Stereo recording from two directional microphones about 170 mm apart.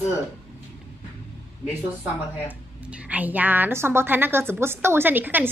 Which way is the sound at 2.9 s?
10° right (ahead or behind).